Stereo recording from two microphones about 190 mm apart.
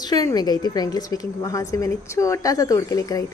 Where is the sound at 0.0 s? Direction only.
20° left (ahead or behind).